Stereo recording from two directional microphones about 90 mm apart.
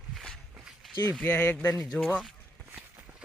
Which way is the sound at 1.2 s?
15° left (ahead or behind).